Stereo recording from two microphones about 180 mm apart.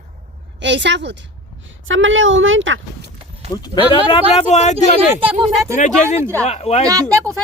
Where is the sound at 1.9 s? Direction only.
90° right.